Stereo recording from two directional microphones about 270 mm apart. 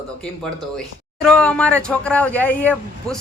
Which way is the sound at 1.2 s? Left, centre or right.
Centre.